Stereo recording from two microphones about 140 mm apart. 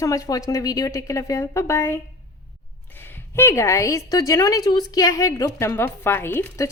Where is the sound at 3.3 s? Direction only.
20° left (ahead or behind).